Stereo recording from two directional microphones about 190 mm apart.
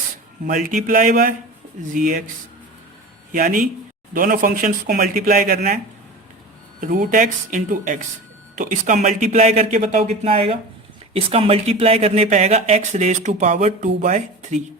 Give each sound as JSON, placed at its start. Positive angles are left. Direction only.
{"t": 0.4, "sound": "speech", "side_deg": -45}
{"t": 3.3, "sound": "speech", "side_deg": -45}
{"t": 6.8, "sound": "speech", "side_deg": -45}